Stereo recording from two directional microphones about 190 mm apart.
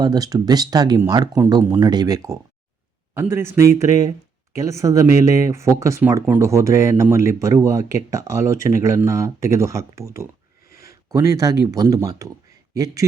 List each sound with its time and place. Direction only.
0.0 s speech: 20° right (ahead or behind)
10.7 s a sound: 50° left (ahead or behind)
11.1 s speech: 15° right (ahead or behind)